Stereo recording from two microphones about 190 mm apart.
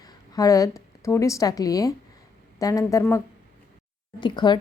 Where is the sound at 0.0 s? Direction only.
20° left (ahead or behind).